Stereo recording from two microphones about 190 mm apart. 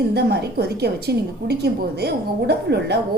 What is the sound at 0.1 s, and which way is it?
A woman's voice, 60° right (ahead or behind).